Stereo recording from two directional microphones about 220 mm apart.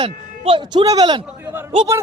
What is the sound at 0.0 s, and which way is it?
Speech, 20° right (ahead or behind).